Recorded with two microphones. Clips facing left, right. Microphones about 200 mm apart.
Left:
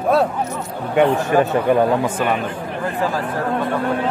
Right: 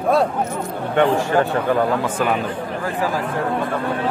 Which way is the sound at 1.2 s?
20° left (ahead or behind).